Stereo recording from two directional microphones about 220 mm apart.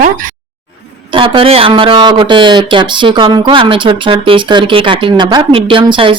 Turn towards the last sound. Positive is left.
turn(degrees=-25)  # may be behind; listen again after turning